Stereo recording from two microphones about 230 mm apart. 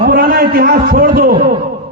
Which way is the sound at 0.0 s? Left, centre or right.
Right.